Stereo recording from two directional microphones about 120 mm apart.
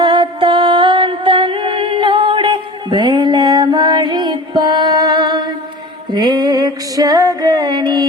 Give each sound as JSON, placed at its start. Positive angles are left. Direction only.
{"t": 0.0, "sound": "music", "side_deg": -45}